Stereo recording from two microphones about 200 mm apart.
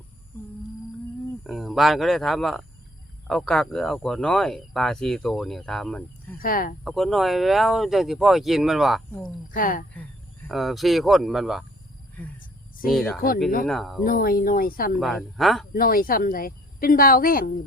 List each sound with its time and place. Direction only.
1.5 s speech: centre (ahead or behind)
6.4 s speech: 45° left (ahead or behind)
6.8 s speech: centre (ahead or behind)
9.5 s speech: 45° left (ahead or behind)
9.9 s speech: 10° left (ahead or behind)
12.9 s speech: centre (ahead or behind)
13.1 s speech: 45° left (ahead or behind)
13.7 s speech: centre (ahead or behind)
14.0 s speech: 45° left (ahead or behind)
14.9 s speech: centre (ahead or behind)
15.7 s speech: 45° left (ahead or behind)